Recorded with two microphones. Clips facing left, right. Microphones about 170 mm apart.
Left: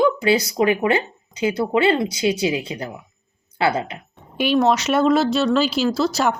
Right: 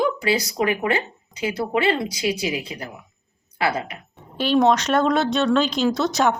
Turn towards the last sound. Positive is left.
turn(degrees=0)  # may be behind; listen again after turning